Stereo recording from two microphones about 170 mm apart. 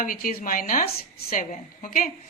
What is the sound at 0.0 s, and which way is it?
Speech, 55° left (ahead or behind).